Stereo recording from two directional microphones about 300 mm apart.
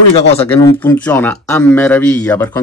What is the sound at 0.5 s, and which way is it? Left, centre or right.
Speech, centre.